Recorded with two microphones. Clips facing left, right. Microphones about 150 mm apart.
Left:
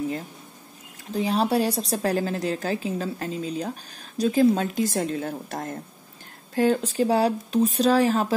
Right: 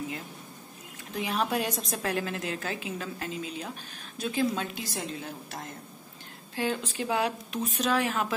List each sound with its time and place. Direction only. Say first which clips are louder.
1.1 s a woman's voice: left 7 dB; 35° left (ahead or behind)